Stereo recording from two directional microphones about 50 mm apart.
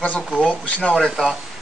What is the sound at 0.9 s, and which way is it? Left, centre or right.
Speech, centre.